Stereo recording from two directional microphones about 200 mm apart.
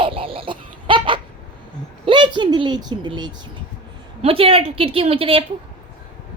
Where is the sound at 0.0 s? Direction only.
25° right (ahead or behind).